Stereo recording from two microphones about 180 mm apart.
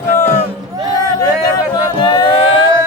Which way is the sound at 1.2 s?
20° left (ahead or behind).